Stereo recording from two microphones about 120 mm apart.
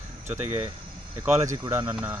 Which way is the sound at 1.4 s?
25° right (ahead or behind).